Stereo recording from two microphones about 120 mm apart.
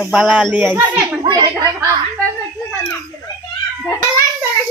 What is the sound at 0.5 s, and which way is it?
Speech, 15° right (ahead or behind).